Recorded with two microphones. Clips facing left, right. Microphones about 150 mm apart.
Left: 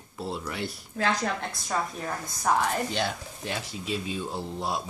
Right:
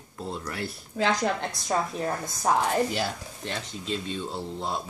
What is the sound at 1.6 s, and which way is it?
Speech, 25° right (ahead or behind).